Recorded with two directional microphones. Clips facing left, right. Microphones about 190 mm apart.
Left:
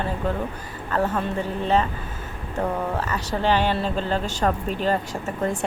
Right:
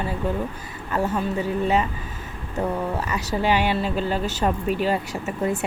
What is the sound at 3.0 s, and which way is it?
Speech, 10° right (ahead or behind).